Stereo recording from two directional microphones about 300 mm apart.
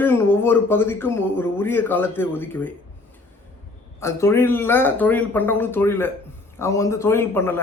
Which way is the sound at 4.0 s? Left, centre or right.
Centre.